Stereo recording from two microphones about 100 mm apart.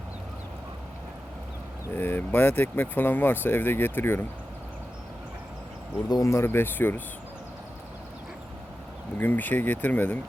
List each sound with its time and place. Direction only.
2.0 s speech: 20° left (ahead or behind)
6.1 s speech: 40° left (ahead or behind)
6.3 s speech: 25° left (ahead or behind)
9.1 s speech: 20° left (ahead or behind)